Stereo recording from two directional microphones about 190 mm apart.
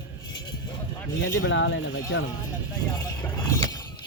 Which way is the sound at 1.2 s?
75° left (ahead or behind).